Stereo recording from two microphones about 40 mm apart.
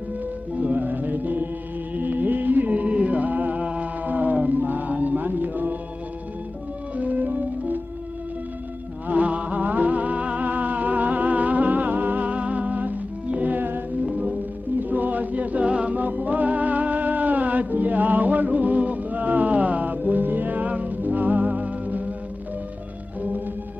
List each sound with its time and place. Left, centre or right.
0.6 s music: right
3.5 s mantra: right
7.0 s music: right
9.0 s music: right
14.0 s music: right
14.8 s a capella: right
15.7 s music: right
16.0 s music: right